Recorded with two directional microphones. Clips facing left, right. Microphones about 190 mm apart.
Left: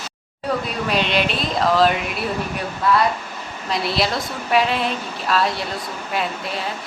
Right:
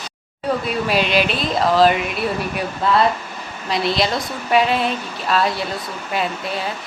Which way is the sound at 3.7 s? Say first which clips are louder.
Right 2 dB; centre (ahead or behind).